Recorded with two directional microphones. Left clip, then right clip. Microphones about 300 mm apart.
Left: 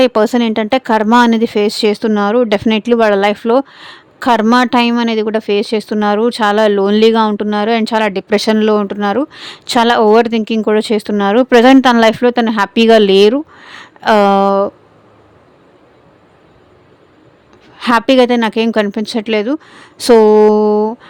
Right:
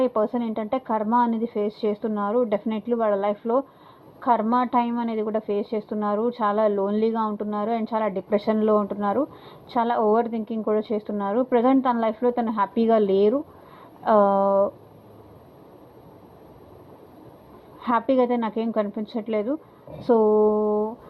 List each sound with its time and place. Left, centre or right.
0.0 s a woman's voice: left
17.7 s a woman's voice: left
20.5 s speech: left